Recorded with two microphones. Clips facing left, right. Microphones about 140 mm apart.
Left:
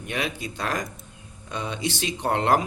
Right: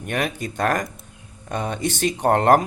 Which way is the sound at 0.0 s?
50° right (ahead or behind).